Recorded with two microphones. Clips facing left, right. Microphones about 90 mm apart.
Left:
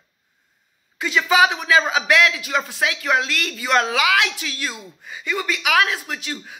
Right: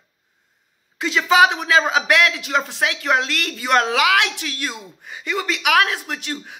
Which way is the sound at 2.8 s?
55° right (ahead or behind).